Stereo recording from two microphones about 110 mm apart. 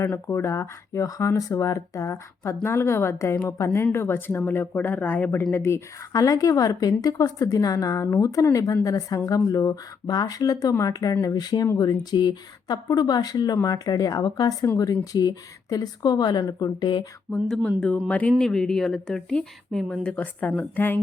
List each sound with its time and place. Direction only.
0.1 s speech: 20° left (ahead or behind); by 17.1 s 40° left (ahead or behind)
17.5 s speech: 10° left (ahead or behind)